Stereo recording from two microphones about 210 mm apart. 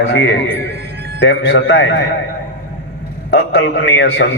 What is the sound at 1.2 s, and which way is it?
Speech, 60° left (ahead or behind).